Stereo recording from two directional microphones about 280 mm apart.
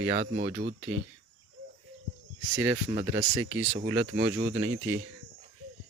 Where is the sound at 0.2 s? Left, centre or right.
Right.